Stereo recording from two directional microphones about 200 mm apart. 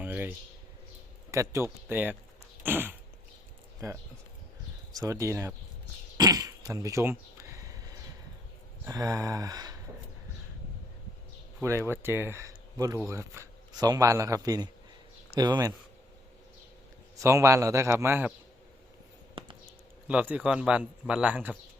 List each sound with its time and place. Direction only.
0.0 s a sound: 10° right (ahead or behind)
1.3 s speech: 15° right (ahead or behind)
4.9 s speech: 15° right (ahead or behind)
6.1 s throat clearing: 20° right (ahead or behind)
8.9 s speech: 15° right (ahead or behind)
11.6 s speech: 10° right (ahead or behind)
17.2 s speech: 15° right (ahead or behind)
20.1 s a man's voice: 5° right (ahead or behind)